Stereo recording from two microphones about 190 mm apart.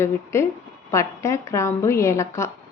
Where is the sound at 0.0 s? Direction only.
15° left (ahead or behind).